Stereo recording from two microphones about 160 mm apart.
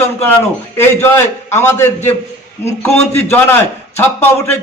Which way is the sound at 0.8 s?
15° left (ahead or behind).